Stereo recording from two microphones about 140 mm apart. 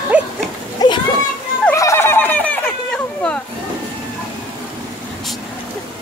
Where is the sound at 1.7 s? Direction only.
20° left (ahead or behind).